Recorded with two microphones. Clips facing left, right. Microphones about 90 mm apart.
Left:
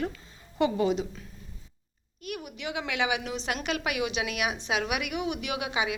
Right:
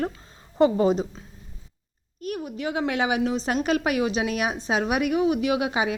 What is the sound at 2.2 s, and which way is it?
A woman's voice, 35° right (ahead or behind).